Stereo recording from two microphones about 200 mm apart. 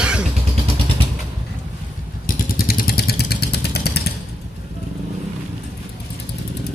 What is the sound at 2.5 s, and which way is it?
Vehicle, 50° left (ahead or behind).